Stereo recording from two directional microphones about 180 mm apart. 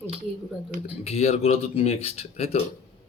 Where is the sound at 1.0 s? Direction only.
35° left (ahead or behind).